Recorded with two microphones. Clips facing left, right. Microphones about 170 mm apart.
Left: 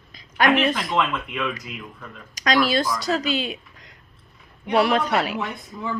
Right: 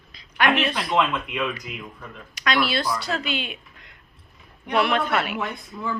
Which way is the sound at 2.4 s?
40° left (ahead or behind).